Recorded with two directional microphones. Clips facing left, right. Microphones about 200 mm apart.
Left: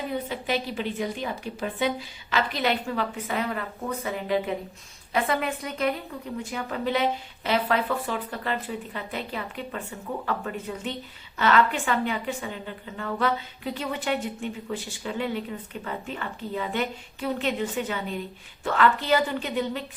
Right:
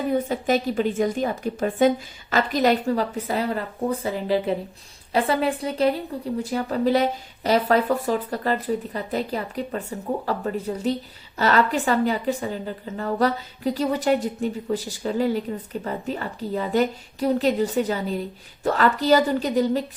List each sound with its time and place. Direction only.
0.1 s a woman's voice: 45° right (ahead or behind)